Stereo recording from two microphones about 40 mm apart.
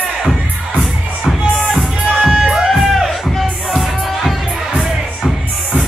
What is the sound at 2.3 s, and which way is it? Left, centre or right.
Music, centre.